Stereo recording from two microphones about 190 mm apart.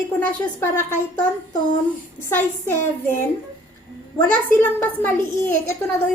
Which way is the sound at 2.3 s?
10° left (ahead or behind).